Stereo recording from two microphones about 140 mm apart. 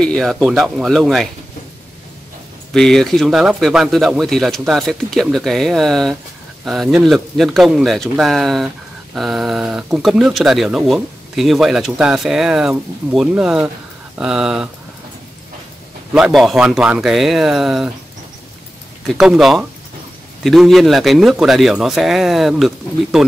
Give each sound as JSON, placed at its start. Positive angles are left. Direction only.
{"t": 0.0, "sound": "speech", "side_deg": 5}
{"t": 2.7, "sound": "speech", "side_deg": 5}
{"t": 16.1, "sound": "speech", "side_deg": -5}
{"t": 19.0, "sound": "speech", "side_deg": 0}